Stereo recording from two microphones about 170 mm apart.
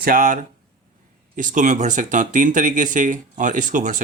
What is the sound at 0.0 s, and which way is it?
Speech, 55° right (ahead or behind).